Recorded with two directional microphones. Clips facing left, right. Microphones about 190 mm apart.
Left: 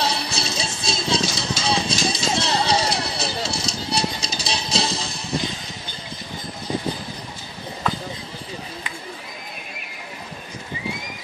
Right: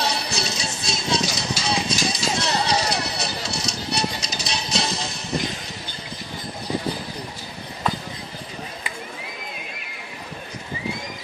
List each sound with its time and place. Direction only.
0.0 s music: 30° left (ahead or behind)